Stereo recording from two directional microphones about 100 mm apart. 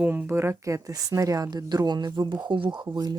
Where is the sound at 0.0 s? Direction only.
20° right (ahead or behind).